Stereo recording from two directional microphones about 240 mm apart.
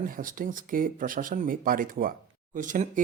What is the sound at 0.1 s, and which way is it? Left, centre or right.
Speech, right.